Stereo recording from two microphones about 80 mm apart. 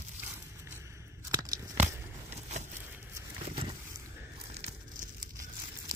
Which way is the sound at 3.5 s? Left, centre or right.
Right.